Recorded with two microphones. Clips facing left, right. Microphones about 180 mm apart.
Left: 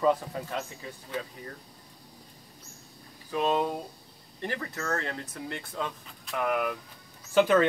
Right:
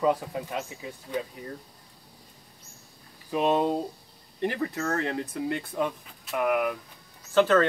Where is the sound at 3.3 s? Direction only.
20° right (ahead or behind).